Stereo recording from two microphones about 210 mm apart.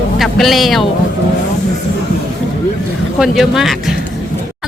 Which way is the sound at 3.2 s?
Centre (ahead or behind).